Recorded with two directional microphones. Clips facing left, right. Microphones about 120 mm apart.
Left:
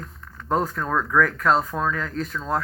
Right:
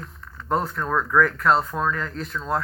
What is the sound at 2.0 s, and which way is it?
Speech, 5° right (ahead or behind).